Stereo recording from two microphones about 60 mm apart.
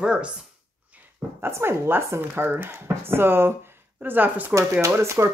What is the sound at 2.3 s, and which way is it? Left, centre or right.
Speech, right.